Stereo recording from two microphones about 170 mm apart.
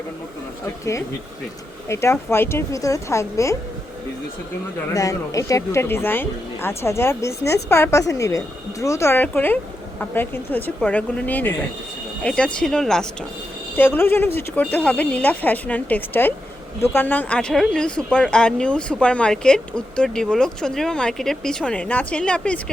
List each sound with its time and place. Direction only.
1.9 s speech: 15° left (ahead or behind)
4.9 s speech: 20° left (ahead or behind)